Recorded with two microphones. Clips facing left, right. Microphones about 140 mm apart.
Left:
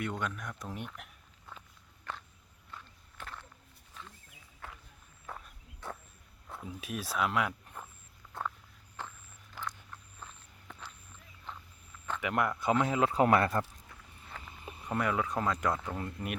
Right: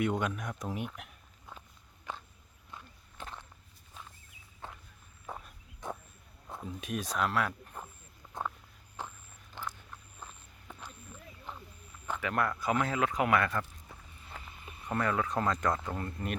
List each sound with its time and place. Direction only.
0.0 s speech: 15° right (ahead or behind)
2.1 s walk: 15° right (ahead or behind)
5.3 s walk: 20° right (ahead or behind)
5.8 s a sound: 15° right (ahead or behind)
6.7 s speech: 5° left (ahead or behind)
8.3 s a sound: 15° right (ahead or behind)
12.2 s speech: 15° left (ahead or behind); by 13.7 s 35° left (ahead or behind)
14.6 s speech: 15° left (ahead or behind)